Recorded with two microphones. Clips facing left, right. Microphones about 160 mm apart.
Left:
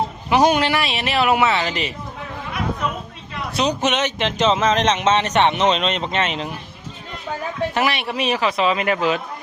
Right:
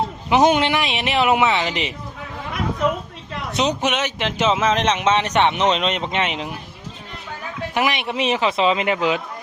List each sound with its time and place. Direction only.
0.3 s a man's voice: 20° right (ahead or behind)
3.5 s speech: 20° right (ahead or behind)
7.7 s a man's voice: 15° right (ahead or behind)